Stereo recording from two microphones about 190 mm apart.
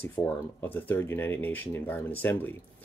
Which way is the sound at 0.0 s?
10° left (ahead or behind).